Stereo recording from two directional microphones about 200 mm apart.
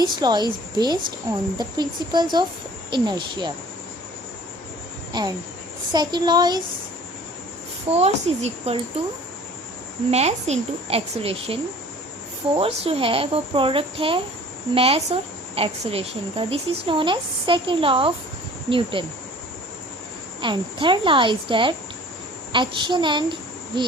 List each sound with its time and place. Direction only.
0.0 s speech: 20° right (ahead or behind)
5.1 s speech: 20° right (ahead or behind)
7.9 s speech: 30° right (ahead or behind)
10.1 s speech: 30° right (ahead or behind)
20.4 s a child's voice: 25° right (ahead or behind)